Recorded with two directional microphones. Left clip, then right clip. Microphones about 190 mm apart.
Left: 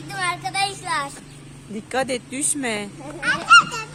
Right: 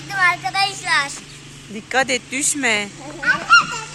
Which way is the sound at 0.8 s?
25° left (ahead or behind).